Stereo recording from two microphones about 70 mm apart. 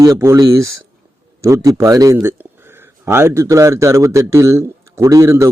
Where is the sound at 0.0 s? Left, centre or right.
Right.